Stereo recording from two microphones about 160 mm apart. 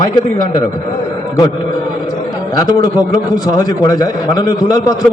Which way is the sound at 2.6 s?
25° left (ahead or behind).